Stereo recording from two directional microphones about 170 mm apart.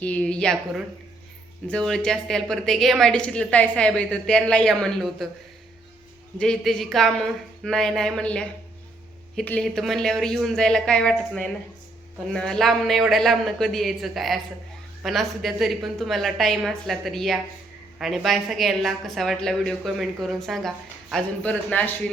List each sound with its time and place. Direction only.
0.0 s a woman's voice: 10° left (ahead or behind)
1.6 s a woman's voice: 5° left (ahead or behind)
6.3 s a woman's voice: 5° left (ahead or behind)